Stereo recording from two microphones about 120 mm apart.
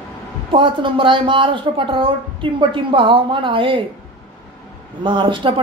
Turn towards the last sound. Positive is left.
turn(degrees=-45)  # may be behind; listen again after turning